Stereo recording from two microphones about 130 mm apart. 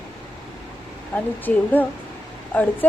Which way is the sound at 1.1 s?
15° left (ahead or behind).